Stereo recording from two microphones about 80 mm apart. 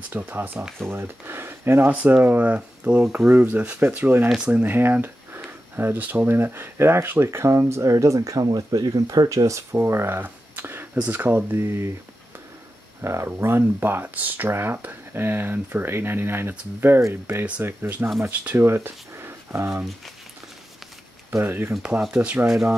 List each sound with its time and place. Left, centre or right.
0.1 s speech: right
1.9 s speech: right
13.0 s speech: right
21.3 s speech: right
22.1 s speech: centre
22.5 s speech: centre